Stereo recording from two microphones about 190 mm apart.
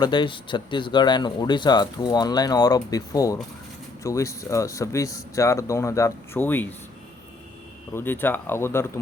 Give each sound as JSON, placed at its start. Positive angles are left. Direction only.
{"t": 0.0, "sound": "speech", "side_deg": 25}
{"t": 7.9, "sound": "speech", "side_deg": 10}